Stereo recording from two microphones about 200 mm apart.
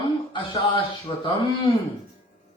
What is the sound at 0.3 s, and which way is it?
Speech, 25° left (ahead or behind).